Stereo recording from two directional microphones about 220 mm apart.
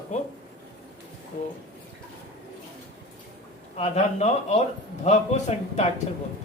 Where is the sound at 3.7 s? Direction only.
30° left (ahead or behind).